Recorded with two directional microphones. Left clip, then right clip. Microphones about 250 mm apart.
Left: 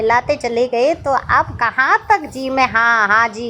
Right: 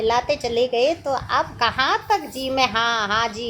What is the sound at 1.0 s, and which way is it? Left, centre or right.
Speech, centre.